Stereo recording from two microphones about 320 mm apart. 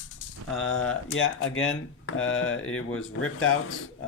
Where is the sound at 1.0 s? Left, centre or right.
Left.